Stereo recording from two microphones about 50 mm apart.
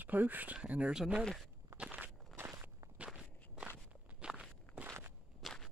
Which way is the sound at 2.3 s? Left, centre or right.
Right.